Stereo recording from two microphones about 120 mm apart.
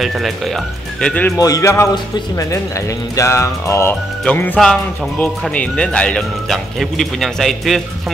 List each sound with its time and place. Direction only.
0.0 s speech: centre (ahead or behind)
1.0 s speech: 10° left (ahead or behind)
1.4 s music: 30° left (ahead or behind)
4.2 s speech: 15° left (ahead or behind)